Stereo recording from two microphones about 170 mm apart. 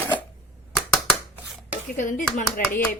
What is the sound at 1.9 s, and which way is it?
Speech, 50° left (ahead or behind).